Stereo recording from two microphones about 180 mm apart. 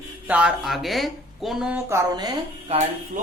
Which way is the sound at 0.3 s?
5° right (ahead or behind).